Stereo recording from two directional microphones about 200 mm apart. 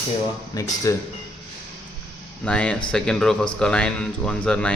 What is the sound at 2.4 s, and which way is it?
Speech, 5° left (ahead or behind).